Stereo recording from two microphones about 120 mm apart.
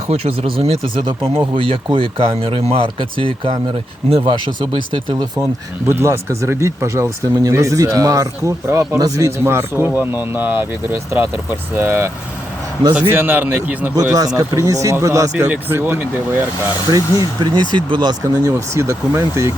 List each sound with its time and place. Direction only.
0.1 s speech: 50° right (ahead or behind)
5.8 s speech: 20° right (ahead or behind)
11.7 s a man's voice: 15° right (ahead or behind)
13.9 s a man's voice: 30° right (ahead or behind)
16.9 s speech: 35° right (ahead or behind)
18.5 s speech: 20° right (ahead or behind)